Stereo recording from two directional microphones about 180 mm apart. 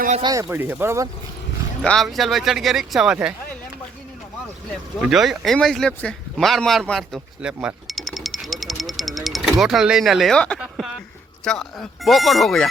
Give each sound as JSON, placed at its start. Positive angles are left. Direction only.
{"t": 0.2, "sound": "speech", "side_deg": -20}
{"t": 1.8, "sound": "speech", "side_deg": 5}
{"t": 4.9, "sound": "speech", "side_deg": 0}
{"t": 10.8, "sound": "a sound", "side_deg": 5}
{"t": 11.4, "sound": "speech", "side_deg": 5}